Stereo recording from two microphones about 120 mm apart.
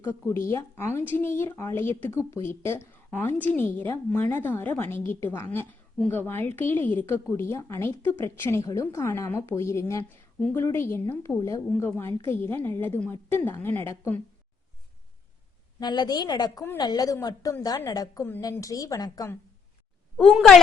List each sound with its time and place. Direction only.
0.0 s a woman's voice: 20° left (ahead or behind)
15.8 s a woman's voice: 35° left (ahead or behind)